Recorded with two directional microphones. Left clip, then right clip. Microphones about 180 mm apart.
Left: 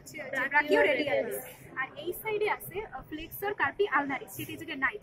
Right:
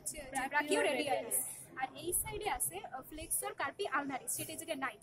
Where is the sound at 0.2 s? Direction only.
40° right (ahead or behind).